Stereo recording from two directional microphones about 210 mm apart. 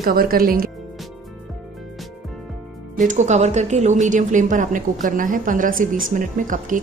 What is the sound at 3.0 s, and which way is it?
Speech, 35° right (ahead or behind).